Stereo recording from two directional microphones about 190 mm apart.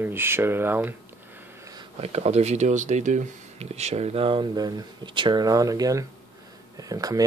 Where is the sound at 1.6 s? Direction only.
20° right (ahead or behind).